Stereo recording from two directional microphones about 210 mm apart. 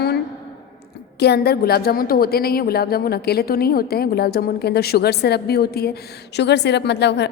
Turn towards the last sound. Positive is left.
turn(degrees=55)  # may be behind; listen again after turning